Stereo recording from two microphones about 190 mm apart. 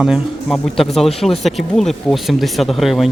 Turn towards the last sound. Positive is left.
turn(degrees=0)  # may be behind; listen again after turning